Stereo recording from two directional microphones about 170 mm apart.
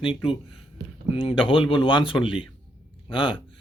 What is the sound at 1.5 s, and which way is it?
Speech, 30° left (ahead or behind).